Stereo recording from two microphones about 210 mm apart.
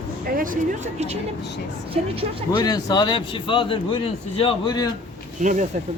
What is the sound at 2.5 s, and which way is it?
A man's voice, 20° left (ahead or behind).